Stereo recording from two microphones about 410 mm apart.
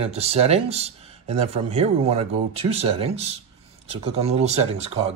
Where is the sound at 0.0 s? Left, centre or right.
Centre.